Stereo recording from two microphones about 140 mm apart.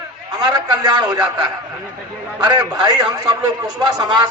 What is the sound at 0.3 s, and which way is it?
Speech, 30° right (ahead or behind).